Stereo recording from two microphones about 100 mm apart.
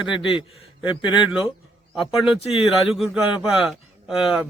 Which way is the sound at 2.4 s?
85° left.